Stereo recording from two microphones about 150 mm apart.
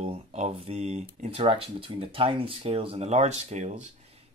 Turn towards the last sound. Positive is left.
turn(degrees=-50)  # may be behind; listen again after turning